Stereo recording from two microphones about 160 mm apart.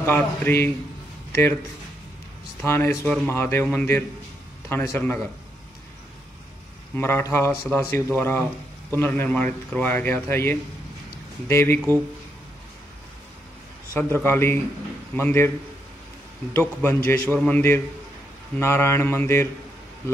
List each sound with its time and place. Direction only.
0.0 s speech: 15° left (ahead or behind)
2.6 s speech: 15° left (ahead or behind)
7.0 s speech: 15° left (ahead or behind)
13.9 s speech: 10° left (ahead or behind)
16.5 s speech: 15° left (ahead or behind)